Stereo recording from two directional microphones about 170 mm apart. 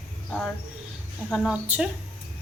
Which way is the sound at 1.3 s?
Centre (ahead or behind).